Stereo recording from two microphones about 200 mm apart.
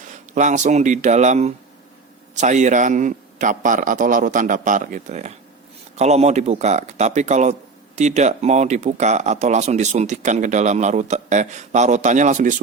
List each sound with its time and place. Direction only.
0.1 s speech: 40° right (ahead or behind)